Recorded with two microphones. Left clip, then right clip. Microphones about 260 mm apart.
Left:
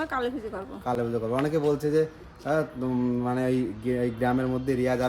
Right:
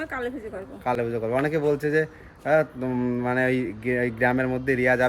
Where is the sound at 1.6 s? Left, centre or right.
Centre.